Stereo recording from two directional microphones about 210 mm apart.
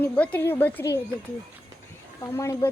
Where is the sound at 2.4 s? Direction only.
15° left (ahead or behind).